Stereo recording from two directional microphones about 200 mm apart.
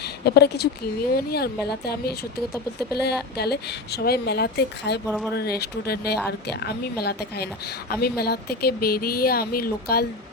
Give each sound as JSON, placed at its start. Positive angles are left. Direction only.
{"t": 0.3, "sound": "a woman's voice", "side_deg": 55}